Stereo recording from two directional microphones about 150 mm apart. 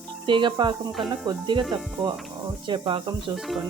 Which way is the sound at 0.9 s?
Centre (ahead or behind).